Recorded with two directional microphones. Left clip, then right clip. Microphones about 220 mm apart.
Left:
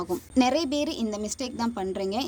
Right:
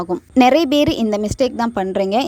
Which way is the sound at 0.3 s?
35° right (ahead or behind).